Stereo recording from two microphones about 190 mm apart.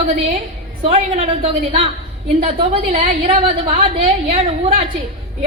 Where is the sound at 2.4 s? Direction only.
35° right (ahead or behind).